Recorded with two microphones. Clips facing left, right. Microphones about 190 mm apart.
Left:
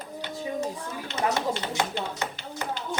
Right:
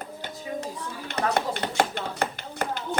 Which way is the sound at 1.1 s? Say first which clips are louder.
Right 1 dB; 55° right (ahead or behind).